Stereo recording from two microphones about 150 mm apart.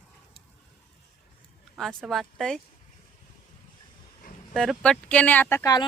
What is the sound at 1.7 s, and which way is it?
Speech, 5° left (ahead or behind).